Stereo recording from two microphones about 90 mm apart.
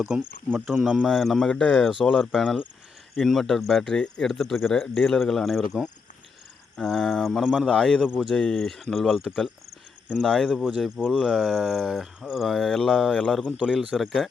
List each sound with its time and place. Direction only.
0.1 s speech: 10° right (ahead or behind)
1.0 s speech: centre (ahead or behind)
7.6 s speech: 10° left (ahead or behind)
8.0 s speech: 10° right (ahead or behind)
8.3 s speech: 5° left (ahead or behind)
13.4 s speech: 10° right (ahead or behind)